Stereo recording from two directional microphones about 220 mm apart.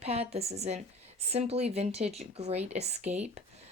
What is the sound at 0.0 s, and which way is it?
A woman's voice, 30° right (ahead or behind).